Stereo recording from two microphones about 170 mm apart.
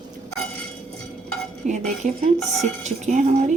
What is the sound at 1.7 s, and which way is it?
A woman's voice, 45° right (ahead or behind).